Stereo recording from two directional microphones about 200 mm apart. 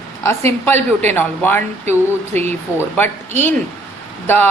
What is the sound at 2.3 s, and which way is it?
Speech, 35° right (ahead or behind).